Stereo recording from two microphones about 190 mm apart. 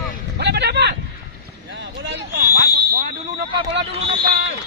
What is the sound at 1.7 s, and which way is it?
Boat, 65° right (ahead or behind).